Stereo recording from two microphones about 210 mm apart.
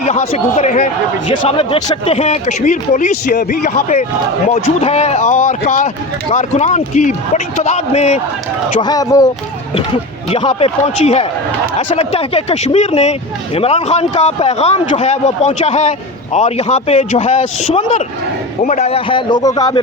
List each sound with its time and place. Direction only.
0.0 s speech: 35° left (ahead or behind)
1.3 s speech: 25° left (ahead or behind)
8.8 s speech: 20° left (ahead or behind)